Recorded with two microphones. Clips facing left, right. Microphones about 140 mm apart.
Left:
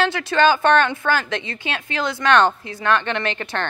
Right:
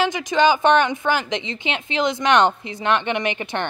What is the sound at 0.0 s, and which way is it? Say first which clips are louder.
A woman's voice: even; 15° right (ahead or behind).